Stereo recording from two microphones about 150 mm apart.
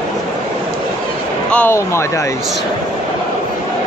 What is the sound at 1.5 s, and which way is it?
Speech, 15° left (ahead or behind).